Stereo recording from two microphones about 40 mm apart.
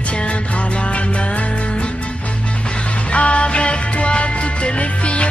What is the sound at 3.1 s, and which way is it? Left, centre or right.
Music, left.